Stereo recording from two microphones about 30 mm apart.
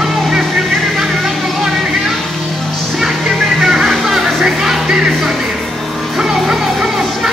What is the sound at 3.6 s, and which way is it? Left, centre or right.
Music, centre.